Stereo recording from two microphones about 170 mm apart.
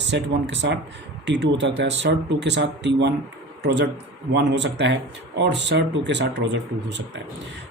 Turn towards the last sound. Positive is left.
turn(degrees=-90)